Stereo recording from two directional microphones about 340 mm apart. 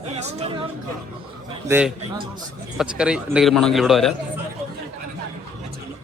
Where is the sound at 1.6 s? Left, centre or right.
Centre.